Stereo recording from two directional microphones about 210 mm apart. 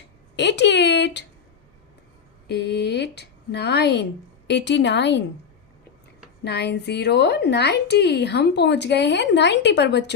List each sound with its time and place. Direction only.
0.3 s speech: 55° left (ahead or behind)
2.5 s a woman's voice: 50° left (ahead or behind)
6.4 s a woman's voice: 50° left (ahead or behind)